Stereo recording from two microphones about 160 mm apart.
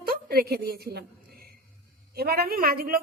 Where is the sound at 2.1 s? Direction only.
80° right.